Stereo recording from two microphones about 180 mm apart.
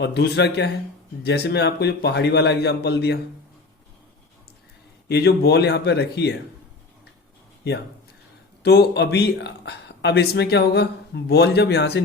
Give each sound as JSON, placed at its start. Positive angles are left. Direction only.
{"t": 0.0, "sound": "speech", "side_deg": 65}
{"t": 5.0, "sound": "speech", "side_deg": 65}
{"t": 8.6, "sound": "speech", "side_deg": 65}